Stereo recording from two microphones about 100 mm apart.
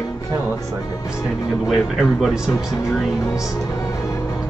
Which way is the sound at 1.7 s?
Centre (ahead or behind).